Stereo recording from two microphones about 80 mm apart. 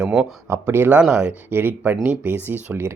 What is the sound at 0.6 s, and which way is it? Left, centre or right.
Speech, right.